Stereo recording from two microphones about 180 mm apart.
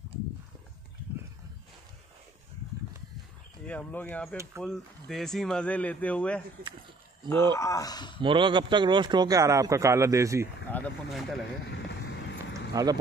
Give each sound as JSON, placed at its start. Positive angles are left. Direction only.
{"t": 3.6, "sound": "speech", "side_deg": 10}
{"t": 7.5, "sound": "speech", "side_deg": 15}
{"t": 8.2, "sound": "speech", "side_deg": -25}
{"t": 10.7, "sound": "speech", "side_deg": 5}
{"t": 12.5, "sound": "a sound", "side_deg": -20}